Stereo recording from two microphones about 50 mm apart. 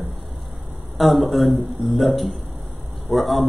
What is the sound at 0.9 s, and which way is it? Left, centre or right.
Speech, centre.